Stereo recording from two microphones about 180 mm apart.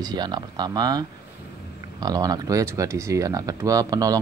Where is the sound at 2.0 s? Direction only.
20° right (ahead or behind).